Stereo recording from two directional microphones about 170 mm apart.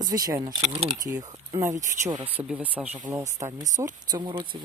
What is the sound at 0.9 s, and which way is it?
Speech, 20° right (ahead or behind).